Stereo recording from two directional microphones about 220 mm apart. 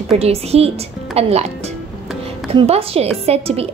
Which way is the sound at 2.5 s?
25° right (ahead or behind).